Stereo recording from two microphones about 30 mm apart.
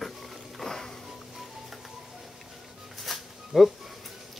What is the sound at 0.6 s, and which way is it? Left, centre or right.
Music, centre.